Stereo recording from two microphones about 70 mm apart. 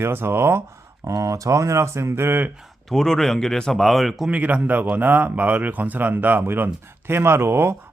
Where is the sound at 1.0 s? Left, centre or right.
Right.